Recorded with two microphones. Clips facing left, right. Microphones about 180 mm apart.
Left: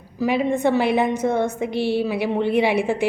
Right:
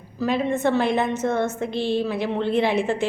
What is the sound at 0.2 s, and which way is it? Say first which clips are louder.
A woman's voice: left 2 dB; 10° left (ahead or behind).